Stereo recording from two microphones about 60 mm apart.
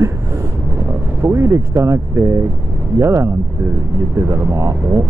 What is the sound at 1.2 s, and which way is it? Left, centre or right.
Speech, right.